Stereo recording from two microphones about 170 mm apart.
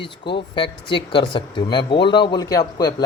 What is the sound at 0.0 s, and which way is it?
Speech, 30° left (ahead or behind).